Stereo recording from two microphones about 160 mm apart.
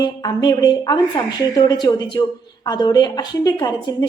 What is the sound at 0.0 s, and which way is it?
A woman's voice, 25° left (ahead or behind).